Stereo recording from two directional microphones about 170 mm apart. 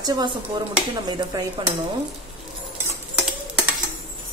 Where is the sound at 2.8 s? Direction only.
5° right (ahead or behind).